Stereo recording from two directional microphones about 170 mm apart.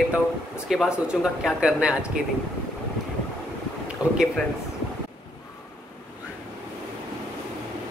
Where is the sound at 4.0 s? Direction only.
20° left (ahead or behind).